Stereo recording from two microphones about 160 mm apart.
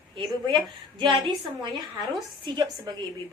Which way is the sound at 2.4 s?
25° right (ahead or behind).